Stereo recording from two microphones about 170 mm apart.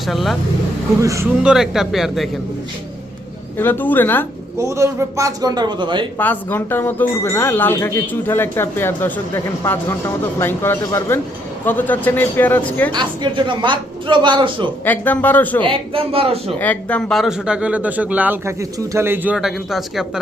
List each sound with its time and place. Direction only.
0.1 s speech: centre (ahead or behind)
1.0 s speech: 20° right (ahead or behind)
1.4 s speech: 5° right (ahead or behind)
3.6 s speech: 10° left (ahead or behind)
4.5 s a man's voice: 15° right (ahead or behind)
6.1 s speech: 10° left (ahead or behind)
12.9 s a man's voice: 25° right (ahead or behind)
14.8 s speech: 10° left (ahead or behind)
15.6 s a man's voice: 30° right (ahead or behind)
16.6 s speech: 10° left (ahead or behind)